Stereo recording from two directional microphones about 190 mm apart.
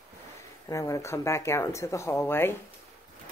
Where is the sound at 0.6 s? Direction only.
15° left (ahead or behind).